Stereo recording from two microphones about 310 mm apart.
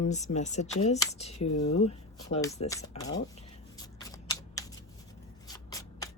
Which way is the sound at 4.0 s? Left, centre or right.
Centre.